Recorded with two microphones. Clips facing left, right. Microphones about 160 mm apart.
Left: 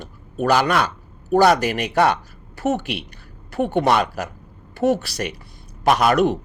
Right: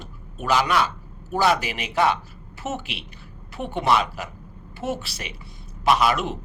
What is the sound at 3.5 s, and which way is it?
Speech, 50° left (ahead or behind).